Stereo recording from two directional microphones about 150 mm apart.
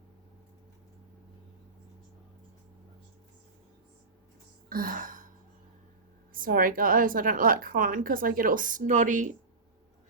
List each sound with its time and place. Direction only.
4.7 s gasp: 70° right (ahead or behind)
6.3 s a woman's voice: 70° right (ahead or behind)